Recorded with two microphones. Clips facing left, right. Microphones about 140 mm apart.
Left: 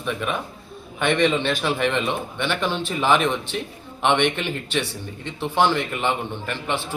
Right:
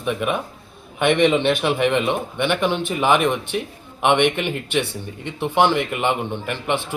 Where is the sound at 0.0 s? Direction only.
15° right (ahead or behind).